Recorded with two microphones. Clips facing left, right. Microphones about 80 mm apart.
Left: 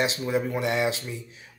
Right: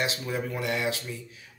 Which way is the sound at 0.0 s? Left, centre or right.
Left.